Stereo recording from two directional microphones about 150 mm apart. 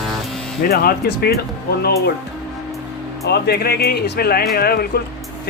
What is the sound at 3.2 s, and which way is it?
Speech, 90° left.